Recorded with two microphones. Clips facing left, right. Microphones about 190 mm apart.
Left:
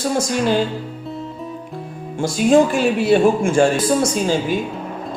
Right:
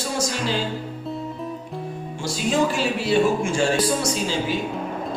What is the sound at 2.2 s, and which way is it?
Speech, 50° left (ahead or behind).